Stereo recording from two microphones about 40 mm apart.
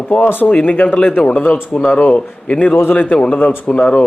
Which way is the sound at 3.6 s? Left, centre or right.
Left.